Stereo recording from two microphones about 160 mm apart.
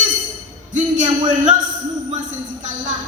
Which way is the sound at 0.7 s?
50° right (ahead or behind).